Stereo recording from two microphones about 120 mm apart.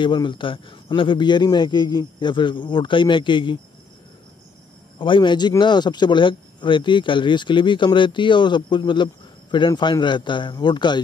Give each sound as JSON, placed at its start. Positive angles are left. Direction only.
{"t": 0.0, "sound": "speech", "side_deg": 40}
{"t": 4.9, "sound": "speech", "side_deg": 45}